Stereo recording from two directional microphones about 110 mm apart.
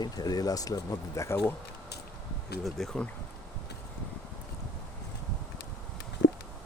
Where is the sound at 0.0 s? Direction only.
40° left (ahead or behind).